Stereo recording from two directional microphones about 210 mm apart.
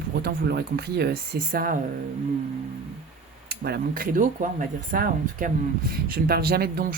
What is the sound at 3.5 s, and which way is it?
Speech, 50° right (ahead or behind).